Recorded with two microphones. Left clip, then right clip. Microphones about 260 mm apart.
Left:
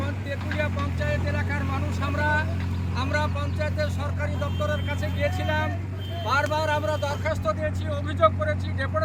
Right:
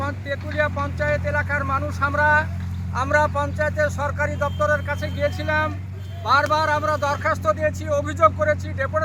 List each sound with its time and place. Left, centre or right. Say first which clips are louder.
0.0 s speech: right 5 dB; centre